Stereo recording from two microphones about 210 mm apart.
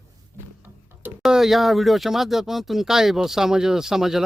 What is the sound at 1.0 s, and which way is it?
Speech, 5° right (ahead or behind).